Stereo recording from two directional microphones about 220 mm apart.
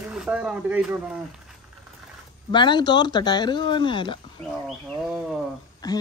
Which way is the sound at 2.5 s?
20° left (ahead or behind).